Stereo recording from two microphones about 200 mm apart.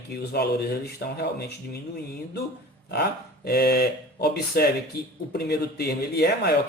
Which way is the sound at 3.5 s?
50° left (ahead or behind).